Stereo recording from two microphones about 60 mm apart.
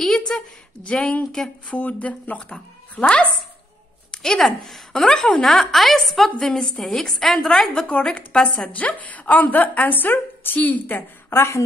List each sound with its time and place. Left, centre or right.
0.0 s a sound: centre
0.8 s a woman's voice: centre
1.8 s a woman's voice: left
4.1 s a woman's voice: centre
8.7 s a woman's voice: left
11.3 s a woman's voice: left